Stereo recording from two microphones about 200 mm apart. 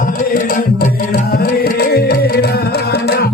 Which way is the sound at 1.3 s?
50° left (ahead or behind).